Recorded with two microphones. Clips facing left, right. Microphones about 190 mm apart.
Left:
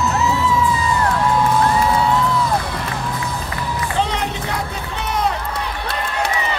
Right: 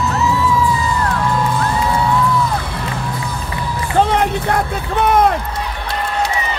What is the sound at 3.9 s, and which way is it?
Run, 50° right (ahead or behind).